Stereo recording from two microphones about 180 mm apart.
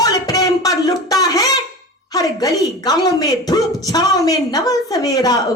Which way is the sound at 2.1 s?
20° left (ahead or behind).